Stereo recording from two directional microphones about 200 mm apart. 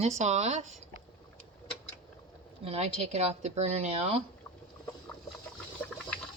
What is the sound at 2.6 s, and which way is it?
Speech, 30° right (ahead or behind).